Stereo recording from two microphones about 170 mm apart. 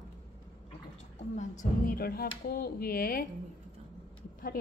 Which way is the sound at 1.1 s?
45° left (ahead or behind).